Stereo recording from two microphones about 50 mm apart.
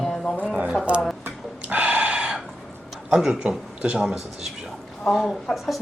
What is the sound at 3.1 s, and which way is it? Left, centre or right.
Speech, centre.